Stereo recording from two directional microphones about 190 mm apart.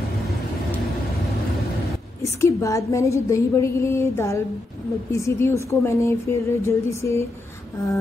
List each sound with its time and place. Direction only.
2.2 s a woman's voice: 15° left (ahead or behind)